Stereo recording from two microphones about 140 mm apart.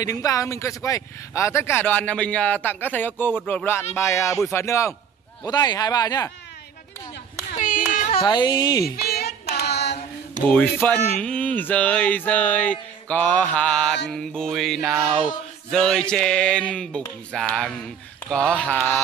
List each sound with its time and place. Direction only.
0.0 s speech: 25° left (ahead or behind)
7.5 s clapping: 75° left (ahead or behind)
8.2 s speech: 30° left (ahead or behind)
8.9 s hands: 90° left
10.5 s speech: 10° left (ahead or behind)
15.7 s a sound: 5° left (ahead or behind)
18.3 s speech: 5° left (ahead or behind)